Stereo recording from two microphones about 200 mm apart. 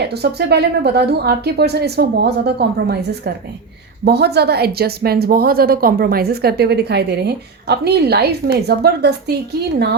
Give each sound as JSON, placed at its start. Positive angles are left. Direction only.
{"t": 0.1, "sound": "a woman's voice", "side_deg": -55}